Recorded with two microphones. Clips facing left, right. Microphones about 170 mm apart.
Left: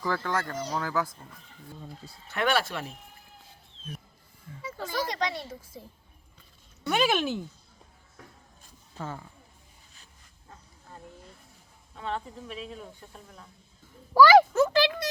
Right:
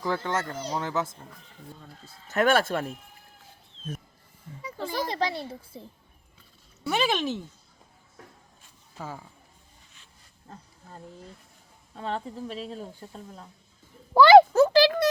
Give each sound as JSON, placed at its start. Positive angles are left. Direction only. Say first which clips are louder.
{"t": 0.0, "sound": "speech", "louder": "right 1 dB", "side_deg": -20}
{"t": 2.3, "sound": "speech", "louder": "right 5 dB", "side_deg": -45}
{"t": 4.8, "sound": "speech", "louder": "right 2 dB", "side_deg": -30}
{"t": 6.8, "sound": "speech", "louder": "left 1 dB", "side_deg": 0}
{"t": 9.0, "sound": "speech", "louder": "left 1 dB", "side_deg": -10}
{"t": 11.9, "sound": "speech", "louder": "right 2 dB", "side_deg": -35}
{"t": 14.1, "sound": "a sound", "louder": "right 4 dB", "side_deg": -25}